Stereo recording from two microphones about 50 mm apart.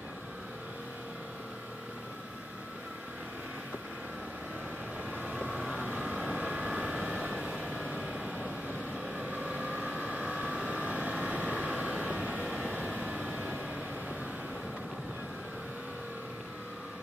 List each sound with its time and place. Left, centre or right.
5.5 s vehicle: centre
8.4 s vehicle: right